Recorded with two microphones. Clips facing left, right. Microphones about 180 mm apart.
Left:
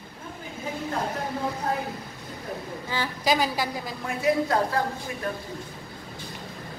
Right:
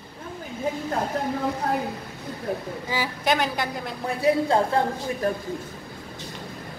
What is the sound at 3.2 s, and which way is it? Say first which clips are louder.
Speech: even; centre (ahead or behind).